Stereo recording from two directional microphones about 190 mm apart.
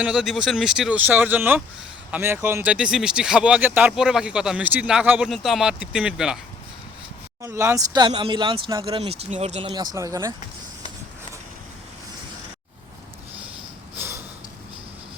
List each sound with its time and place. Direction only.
0.0 s speech: 5° right (ahead or behind)
7.4 s speech: 15° right (ahead or behind)